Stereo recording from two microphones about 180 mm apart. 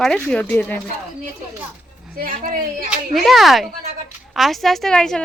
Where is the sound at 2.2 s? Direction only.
50° right (ahead or behind).